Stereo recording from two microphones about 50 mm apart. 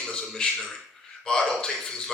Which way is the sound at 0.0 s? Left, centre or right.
Centre.